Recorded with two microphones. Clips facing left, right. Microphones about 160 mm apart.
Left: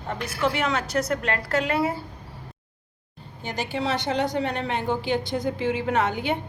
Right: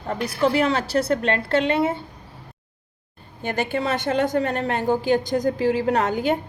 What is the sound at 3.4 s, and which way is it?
A woman's voice, 55° right (ahead or behind).